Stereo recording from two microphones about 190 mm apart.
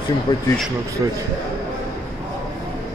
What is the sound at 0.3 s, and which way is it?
Speech, 25° left (ahead or behind).